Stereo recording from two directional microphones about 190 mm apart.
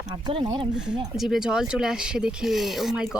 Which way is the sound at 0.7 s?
5° right (ahead or behind).